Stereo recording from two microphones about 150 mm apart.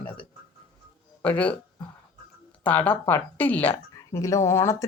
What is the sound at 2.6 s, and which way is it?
Speech, 10° left (ahead or behind).